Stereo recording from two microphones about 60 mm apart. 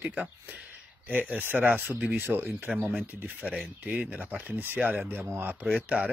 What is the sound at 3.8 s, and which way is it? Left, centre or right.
Speech, centre.